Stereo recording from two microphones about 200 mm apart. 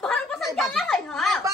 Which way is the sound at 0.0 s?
Centre (ahead or behind).